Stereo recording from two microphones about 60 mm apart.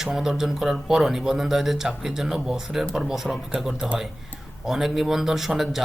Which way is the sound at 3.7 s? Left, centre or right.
Centre.